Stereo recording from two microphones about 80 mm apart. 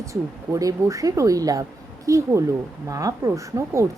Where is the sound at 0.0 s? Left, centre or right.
Right.